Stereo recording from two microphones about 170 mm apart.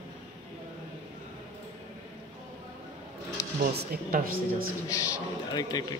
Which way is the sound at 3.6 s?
60° right (ahead or behind).